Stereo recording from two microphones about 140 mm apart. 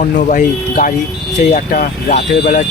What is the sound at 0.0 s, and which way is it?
Speech, 70° left (ahead or behind).